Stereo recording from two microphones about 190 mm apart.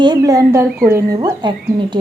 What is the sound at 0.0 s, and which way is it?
Speech, 20° right (ahead or behind).